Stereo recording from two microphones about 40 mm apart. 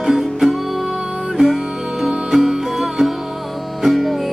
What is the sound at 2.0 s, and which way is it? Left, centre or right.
Music, centre.